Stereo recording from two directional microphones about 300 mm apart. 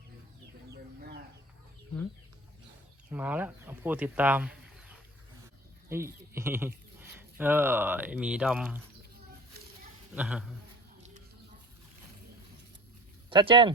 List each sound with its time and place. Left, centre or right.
0.7 s chicken: right
3.1 s speech: centre
5.9 s speech: centre
10.2 s a man's voice: centre
13.3 s speech: centre